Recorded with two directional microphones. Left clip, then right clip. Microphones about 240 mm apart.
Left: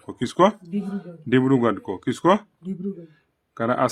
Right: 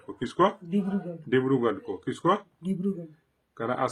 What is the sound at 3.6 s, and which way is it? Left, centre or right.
Speech, left.